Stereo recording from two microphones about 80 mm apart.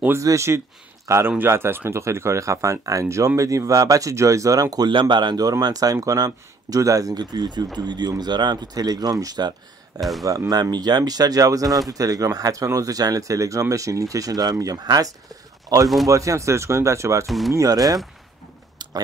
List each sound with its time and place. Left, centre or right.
0.2 s a man's voice: right
9.9 s speech: centre
10.2 s speech: right
17.3 s speech: centre
17.6 s speech: right